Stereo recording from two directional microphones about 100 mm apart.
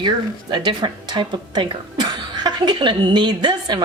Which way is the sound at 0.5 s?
50° right (ahead or behind).